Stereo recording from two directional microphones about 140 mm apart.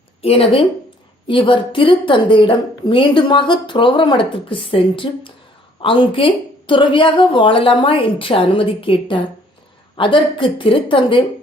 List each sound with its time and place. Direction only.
0.2 s a woman's voice: 45° left (ahead or behind)